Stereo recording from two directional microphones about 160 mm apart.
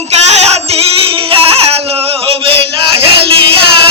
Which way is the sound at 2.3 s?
35° right (ahead or behind).